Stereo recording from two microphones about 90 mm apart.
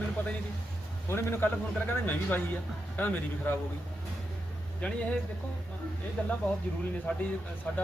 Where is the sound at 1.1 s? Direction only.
30° left (ahead or behind).